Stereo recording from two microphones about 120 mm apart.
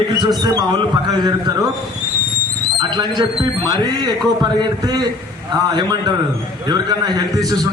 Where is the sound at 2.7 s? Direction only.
35° right (ahead or behind).